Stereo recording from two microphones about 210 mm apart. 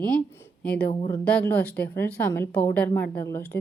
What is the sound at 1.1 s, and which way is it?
A woman's voice, 5° left (ahead or behind).